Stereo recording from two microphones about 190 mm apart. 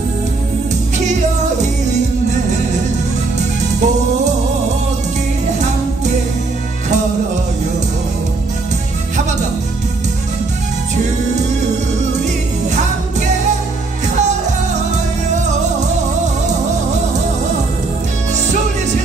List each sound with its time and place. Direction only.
3.3 s music: 40° right (ahead or behind)